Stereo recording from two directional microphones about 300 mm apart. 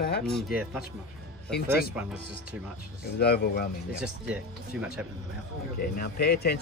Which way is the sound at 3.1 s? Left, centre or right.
Left.